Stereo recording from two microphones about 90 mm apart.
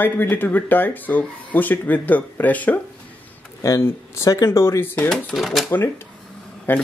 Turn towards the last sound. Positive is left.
turn(degrees=20)  # may be behind; listen again after turning